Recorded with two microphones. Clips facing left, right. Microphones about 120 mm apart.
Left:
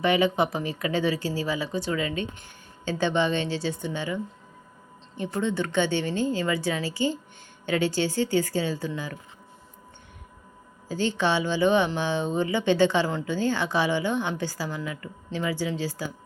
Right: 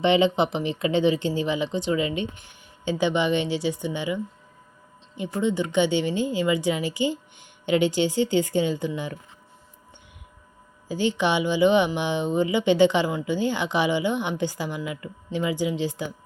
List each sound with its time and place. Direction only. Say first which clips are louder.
0.0 s speech: right 2 dB; 25° right (ahead or behind)
10.8 s speech: right 2 dB; 15° right (ahead or behind)